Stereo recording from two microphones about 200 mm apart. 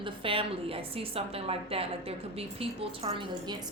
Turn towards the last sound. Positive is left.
turn(degrees=-30)  # may be behind; listen again after turning